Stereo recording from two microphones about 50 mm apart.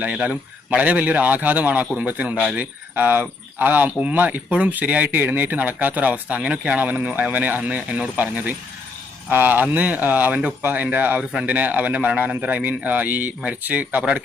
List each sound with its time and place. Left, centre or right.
0.2 s speech: right